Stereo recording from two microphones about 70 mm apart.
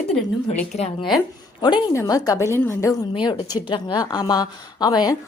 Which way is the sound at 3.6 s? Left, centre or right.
Left.